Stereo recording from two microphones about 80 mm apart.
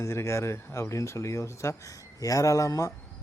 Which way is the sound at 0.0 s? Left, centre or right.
Left.